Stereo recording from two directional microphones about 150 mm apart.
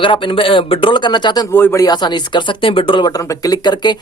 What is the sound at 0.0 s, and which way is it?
A man's voice, 35° left (ahead or behind).